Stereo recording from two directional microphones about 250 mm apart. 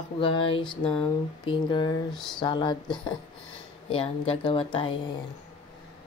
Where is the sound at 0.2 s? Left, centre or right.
Left.